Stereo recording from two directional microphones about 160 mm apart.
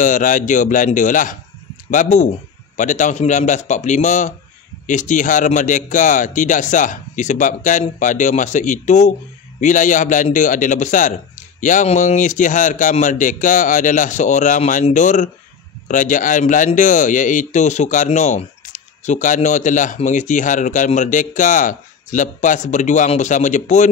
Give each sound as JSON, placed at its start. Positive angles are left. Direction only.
{"t": 0.0, "sound": "speech", "side_deg": 55}